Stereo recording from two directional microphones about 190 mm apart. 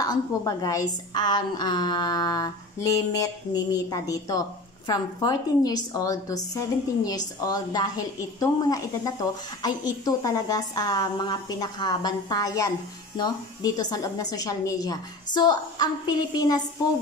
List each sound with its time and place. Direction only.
0.0 s a woman's voice: 20° left (ahead or behind)